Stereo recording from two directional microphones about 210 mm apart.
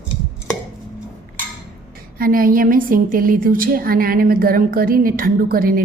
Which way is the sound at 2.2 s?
40° right (ahead or behind).